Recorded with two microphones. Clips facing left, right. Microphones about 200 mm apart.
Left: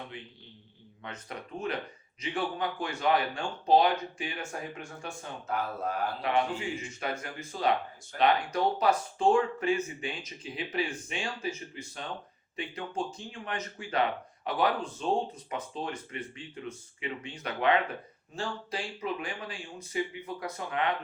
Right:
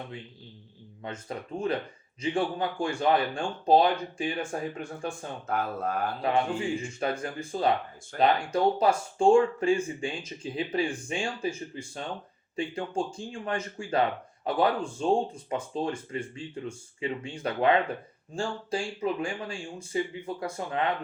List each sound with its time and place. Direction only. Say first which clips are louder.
1.0 s speech: right 5 dB; 30° right (ahead or behind)
6.2 s speech: right 3 dB; 30° right (ahead or behind)